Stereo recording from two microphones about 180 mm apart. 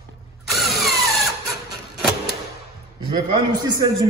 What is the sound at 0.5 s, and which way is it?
Drill, centre (ahead or behind).